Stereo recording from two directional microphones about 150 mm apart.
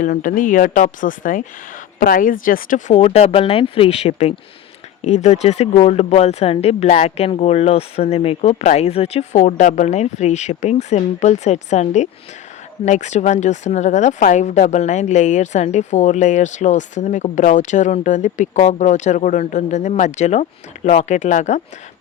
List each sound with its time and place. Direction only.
0.0 s speech: 65° left (ahead or behind)